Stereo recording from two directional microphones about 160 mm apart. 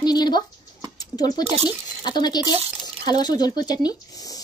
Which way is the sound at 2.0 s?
25° left (ahead or behind).